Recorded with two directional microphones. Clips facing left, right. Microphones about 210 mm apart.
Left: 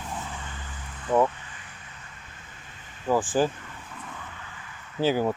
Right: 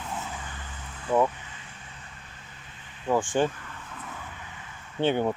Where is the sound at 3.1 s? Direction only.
5° left (ahead or behind).